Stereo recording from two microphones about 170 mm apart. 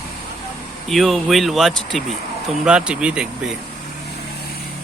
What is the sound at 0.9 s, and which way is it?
Speech, centre (ahead or behind).